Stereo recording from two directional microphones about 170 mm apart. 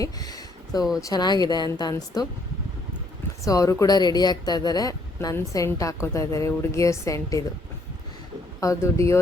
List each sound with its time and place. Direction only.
0.0 s a sound: 20° left (ahead or behind)
0.9 s speech: 20° left (ahead or behind)
3.4 s speech: 20° left (ahead or behind)
8.6 s speech: 20° left (ahead or behind)